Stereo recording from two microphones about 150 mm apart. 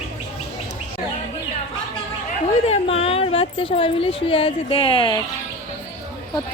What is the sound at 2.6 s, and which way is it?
Speech, 40° left (ahead or behind).